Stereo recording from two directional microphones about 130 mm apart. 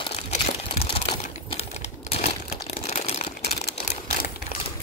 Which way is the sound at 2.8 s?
55° left (ahead or behind).